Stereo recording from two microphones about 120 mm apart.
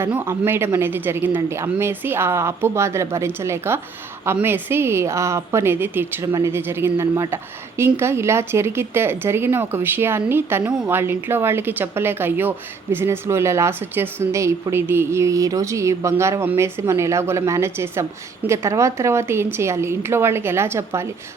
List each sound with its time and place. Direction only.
0.0 s speech: 20° right (ahead or behind)